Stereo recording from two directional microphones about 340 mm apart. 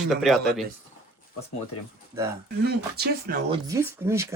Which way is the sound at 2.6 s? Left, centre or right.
Right.